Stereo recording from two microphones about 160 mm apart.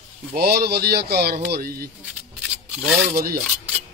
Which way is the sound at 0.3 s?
75° right (ahead or behind).